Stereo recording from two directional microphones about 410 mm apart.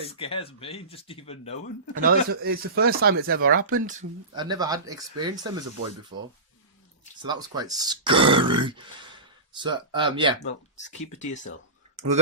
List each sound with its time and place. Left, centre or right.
0.2 s speech: centre
2.0 s speech: right
4.4 s speech: centre
11.0 s speech: centre